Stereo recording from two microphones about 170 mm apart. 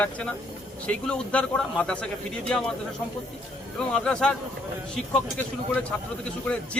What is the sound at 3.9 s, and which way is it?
Speech, 5° left (ahead or behind).